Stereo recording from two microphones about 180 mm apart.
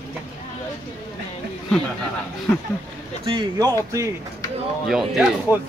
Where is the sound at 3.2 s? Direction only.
30° right (ahead or behind).